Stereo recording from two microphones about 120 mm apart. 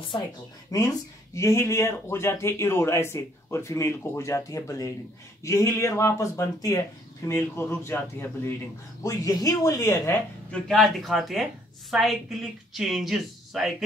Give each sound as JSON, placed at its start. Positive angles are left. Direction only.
{"t": 0.7, "sound": "speech", "side_deg": 30}
{"t": 10.5, "sound": "speech", "side_deg": 0}